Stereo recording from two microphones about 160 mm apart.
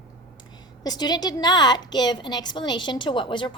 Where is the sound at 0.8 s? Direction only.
25° left (ahead or behind).